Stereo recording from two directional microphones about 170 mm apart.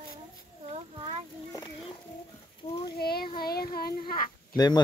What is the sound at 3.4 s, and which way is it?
Child singing, 65° left (ahead or behind).